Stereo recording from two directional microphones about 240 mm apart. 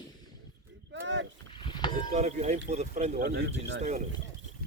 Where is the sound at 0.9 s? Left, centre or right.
Right.